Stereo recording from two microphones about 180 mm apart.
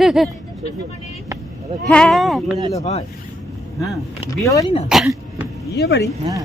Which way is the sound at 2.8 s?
40° left (ahead or behind).